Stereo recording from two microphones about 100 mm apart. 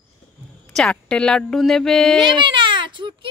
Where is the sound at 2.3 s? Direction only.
55° right (ahead or behind).